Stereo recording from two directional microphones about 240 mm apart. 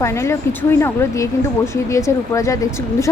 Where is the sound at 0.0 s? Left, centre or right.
Centre.